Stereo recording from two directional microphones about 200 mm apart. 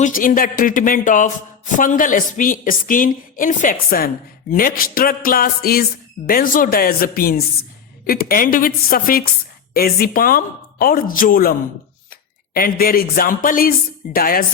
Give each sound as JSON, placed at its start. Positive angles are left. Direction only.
{"t": 0.0, "sound": "a woman's voice", "side_deg": 45}
{"t": 12.5, "sound": "a woman's voice", "side_deg": 45}